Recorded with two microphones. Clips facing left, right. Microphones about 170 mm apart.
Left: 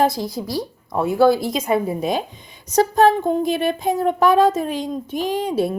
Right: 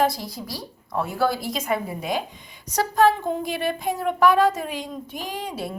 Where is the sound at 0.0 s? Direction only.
20° left (ahead or behind).